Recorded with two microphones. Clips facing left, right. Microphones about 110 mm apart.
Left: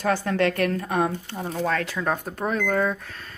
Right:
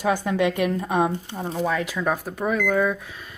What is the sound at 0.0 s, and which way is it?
A woman's voice, 15° right (ahead or behind).